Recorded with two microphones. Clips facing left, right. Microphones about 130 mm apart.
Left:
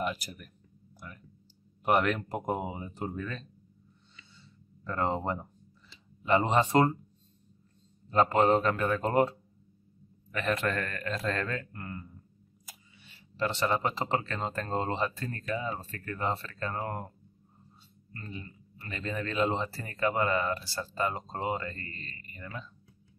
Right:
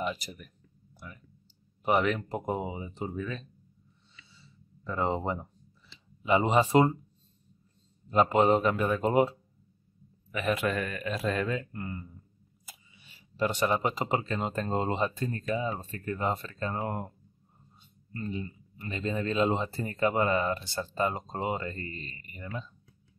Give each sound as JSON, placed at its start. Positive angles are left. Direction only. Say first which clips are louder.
{"t": 0.0, "sound": "speech", "louder": "even", "side_deg": 0}
{"t": 0.9, "sound": "a sound", "louder": "even", "side_deg": 0}
{"t": 1.9, "sound": "speech", "louder": "even", "side_deg": 0}
{"t": 4.4, "sound": "a sound", "louder": "left 1 dB", "side_deg": -5}
{"t": 6.2, "sound": "speech", "louder": "right 1 dB", "side_deg": -5}
{"t": 8.1, "sound": "speech", "louder": "right 1 dB", "side_deg": -10}
{"t": 18.1, "sound": "speech", "louder": "right 8 dB", "side_deg": -20}